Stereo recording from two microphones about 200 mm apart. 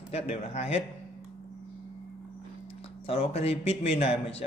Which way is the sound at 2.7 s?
30° left (ahead or behind).